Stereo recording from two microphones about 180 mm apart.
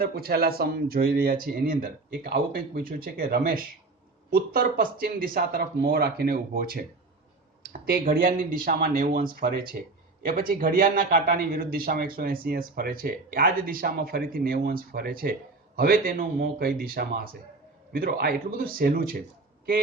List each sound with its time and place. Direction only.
0.0 s a man's voice: 60° right (ahead or behind)